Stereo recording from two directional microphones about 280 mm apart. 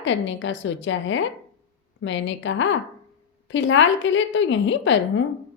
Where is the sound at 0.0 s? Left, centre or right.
Left.